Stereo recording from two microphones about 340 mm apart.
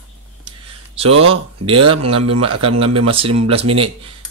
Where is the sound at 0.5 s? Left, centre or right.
Centre.